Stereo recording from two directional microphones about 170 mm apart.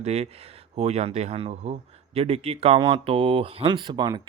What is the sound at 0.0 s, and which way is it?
Speech, 40° right (ahead or behind).